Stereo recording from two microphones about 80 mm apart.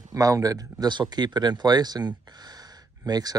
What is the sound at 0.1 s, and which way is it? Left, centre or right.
Speech, right.